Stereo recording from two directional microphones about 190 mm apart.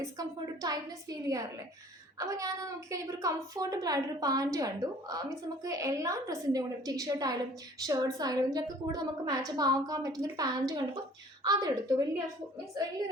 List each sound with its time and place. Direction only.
0.0 s a woman's voice: 20° right (ahead or behind)